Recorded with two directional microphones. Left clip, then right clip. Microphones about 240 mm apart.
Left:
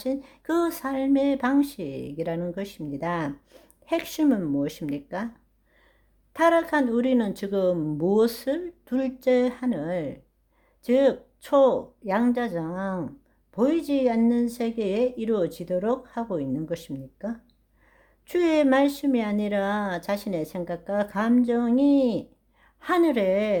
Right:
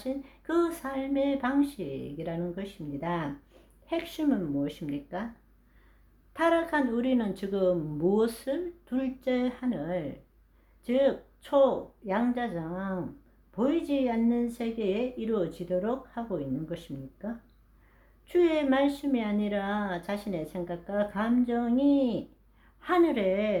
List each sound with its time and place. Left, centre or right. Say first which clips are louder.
0.0 s speech: left 6 dB; left
6.3 s speech: left 5 dB; left